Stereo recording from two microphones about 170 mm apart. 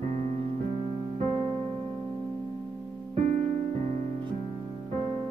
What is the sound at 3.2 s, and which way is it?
Music, 45° right (ahead or behind).